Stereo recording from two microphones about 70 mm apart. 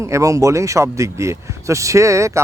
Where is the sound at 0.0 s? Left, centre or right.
Right.